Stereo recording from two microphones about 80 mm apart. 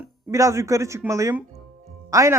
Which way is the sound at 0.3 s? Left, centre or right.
Right.